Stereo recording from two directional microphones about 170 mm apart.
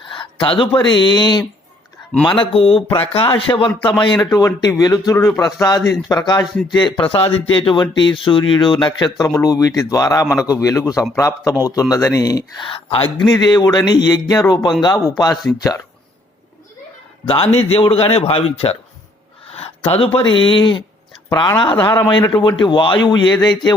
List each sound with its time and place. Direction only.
0.1 s a man's voice: 30° left (ahead or behind)
6.4 s speech: centre (ahead or behind)
6.7 s speech: 30° left (ahead or behind)
17.2 s a man's voice: 35° left (ahead or behind)